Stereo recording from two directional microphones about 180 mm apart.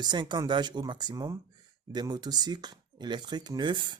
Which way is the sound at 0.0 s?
25° right (ahead or behind).